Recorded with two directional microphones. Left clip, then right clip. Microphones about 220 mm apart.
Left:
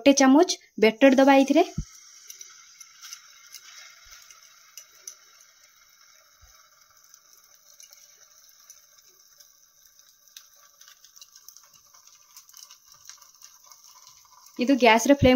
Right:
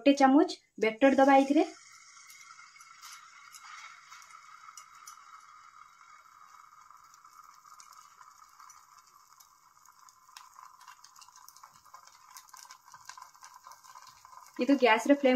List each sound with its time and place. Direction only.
0.0 s speech: 40° left (ahead or behind)
14.6 s speech: 35° left (ahead or behind)